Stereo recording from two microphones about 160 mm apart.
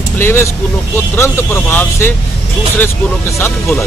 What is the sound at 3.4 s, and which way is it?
Speech, 15° left (ahead or behind).